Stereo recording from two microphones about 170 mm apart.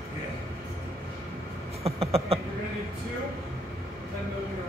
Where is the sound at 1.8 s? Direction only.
35° right (ahead or behind).